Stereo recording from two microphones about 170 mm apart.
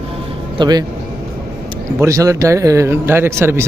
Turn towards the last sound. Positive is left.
turn(degrees=-15)  # may be behind; listen again after turning